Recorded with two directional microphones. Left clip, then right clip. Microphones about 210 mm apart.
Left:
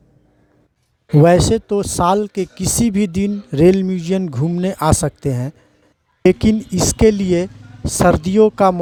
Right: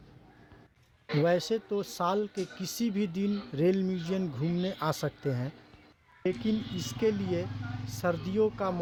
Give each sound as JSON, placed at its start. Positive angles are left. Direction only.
{"t": 1.2, "sound": "speech", "side_deg": 50}